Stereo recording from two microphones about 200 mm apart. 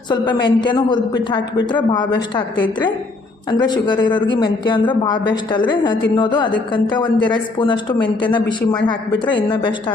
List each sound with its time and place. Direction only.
0.4 s a man's voice: 20° left (ahead or behind)
3.6 s a man's voice: 20° left (ahead or behind)